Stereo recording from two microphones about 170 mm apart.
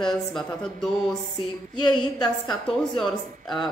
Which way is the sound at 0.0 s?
Centre (ahead or behind).